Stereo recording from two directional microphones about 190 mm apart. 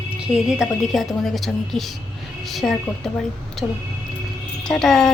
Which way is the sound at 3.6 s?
30° left (ahead or behind).